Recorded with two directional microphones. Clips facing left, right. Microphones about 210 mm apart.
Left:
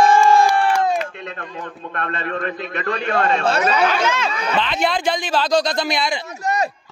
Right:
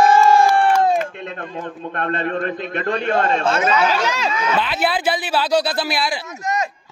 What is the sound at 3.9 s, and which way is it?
Speech, 35° right (ahead or behind).